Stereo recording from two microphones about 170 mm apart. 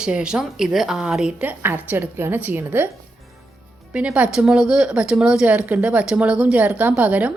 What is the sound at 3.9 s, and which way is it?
Speech, 5° right (ahead or behind).